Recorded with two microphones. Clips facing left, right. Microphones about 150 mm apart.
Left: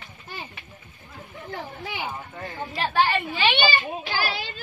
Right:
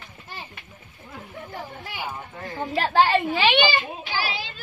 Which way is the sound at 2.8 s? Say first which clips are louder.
Right 3 dB; 90° right.